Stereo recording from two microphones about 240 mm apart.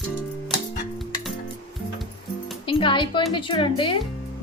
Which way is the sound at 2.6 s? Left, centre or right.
Left.